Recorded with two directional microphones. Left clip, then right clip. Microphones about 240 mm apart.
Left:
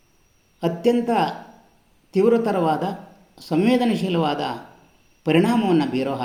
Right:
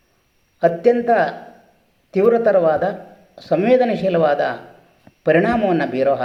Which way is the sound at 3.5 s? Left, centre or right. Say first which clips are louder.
Right 5 dB; centre.